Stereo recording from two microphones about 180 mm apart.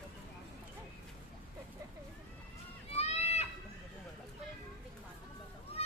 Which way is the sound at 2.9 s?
35° left (ahead or behind).